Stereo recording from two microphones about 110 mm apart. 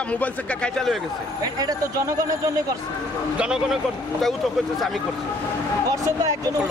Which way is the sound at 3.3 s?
5° right (ahead or behind).